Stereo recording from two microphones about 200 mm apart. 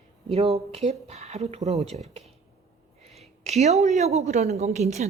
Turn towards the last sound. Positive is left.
turn(degrees=-35)  # may be behind; listen again after turning